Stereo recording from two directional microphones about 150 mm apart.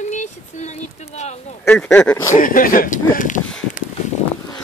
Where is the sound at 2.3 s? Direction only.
65° left (ahead or behind).